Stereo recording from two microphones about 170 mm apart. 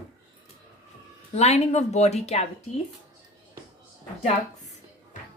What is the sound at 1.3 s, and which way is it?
A woman's voice, 40° left (ahead or behind).